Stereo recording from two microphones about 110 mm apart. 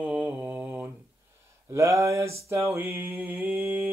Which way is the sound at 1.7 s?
25° right (ahead or behind).